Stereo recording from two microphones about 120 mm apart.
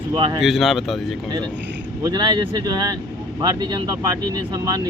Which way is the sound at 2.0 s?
35° right (ahead or behind).